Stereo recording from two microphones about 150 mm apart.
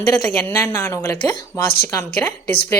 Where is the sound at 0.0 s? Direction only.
15° left (ahead or behind).